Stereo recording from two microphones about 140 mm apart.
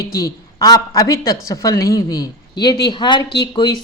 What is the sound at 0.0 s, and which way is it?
A woman's voice, 25° left (ahead or behind).